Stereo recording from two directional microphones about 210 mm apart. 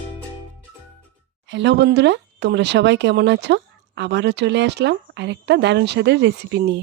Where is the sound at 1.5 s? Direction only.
60° right (ahead or behind).